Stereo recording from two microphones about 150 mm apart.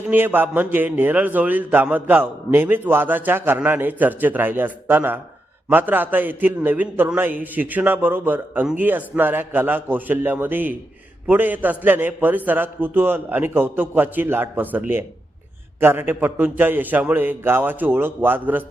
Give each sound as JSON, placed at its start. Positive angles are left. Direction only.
{"t": 0.1, "sound": "a man's voice", "side_deg": -15}